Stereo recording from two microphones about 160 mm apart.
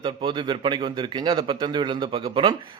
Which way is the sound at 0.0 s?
30° right (ahead or behind).